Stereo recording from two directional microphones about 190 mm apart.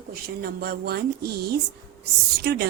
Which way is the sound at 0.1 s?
55° right (ahead or behind).